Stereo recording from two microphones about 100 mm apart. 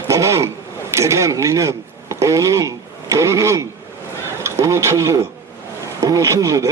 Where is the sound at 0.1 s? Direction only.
30° right (ahead or behind).